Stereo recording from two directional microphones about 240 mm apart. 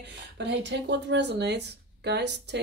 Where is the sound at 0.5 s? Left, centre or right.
Right.